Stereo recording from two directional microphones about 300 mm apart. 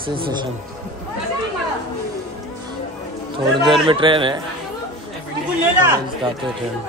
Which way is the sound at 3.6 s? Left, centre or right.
Centre.